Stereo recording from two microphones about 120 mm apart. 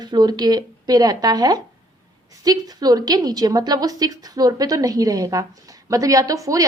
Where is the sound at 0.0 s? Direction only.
35° right (ahead or behind).